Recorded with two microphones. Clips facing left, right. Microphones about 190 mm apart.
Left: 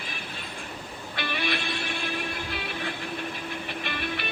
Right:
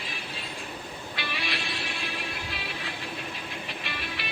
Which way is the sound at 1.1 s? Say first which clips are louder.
Left 5 dB; 50° left (ahead or behind).